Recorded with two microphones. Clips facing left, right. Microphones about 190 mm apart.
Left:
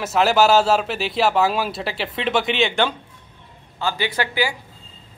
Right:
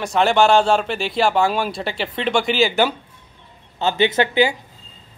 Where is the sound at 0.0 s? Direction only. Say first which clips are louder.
Right 1 dB; 5° left (ahead or behind).